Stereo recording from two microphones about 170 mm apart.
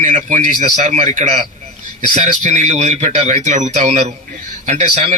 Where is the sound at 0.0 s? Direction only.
45° right (ahead or behind).